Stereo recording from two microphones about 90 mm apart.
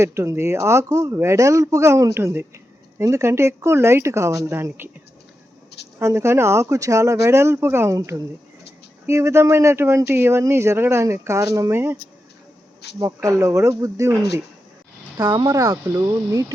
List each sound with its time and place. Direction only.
0.0 s speech: 30° right (ahead or behind)
2.1 s a woman's voice: 25° right (ahead or behind)
6.0 s speech: 30° right (ahead or behind)
9.0 s speech: 30° right (ahead or behind)
11.7 s a woman's voice: 25° right (ahead or behind)
13.2 s speech: 35° right (ahead or behind)
15.2 s speech: 50° right (ahead or behind)
15.4 s speech: 35° right (ahead or behind)